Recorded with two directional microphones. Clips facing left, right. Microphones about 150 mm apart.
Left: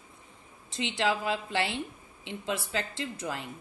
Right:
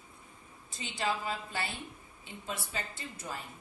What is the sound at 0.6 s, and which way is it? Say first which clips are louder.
A woman's voice: left 6 dB; 80° left.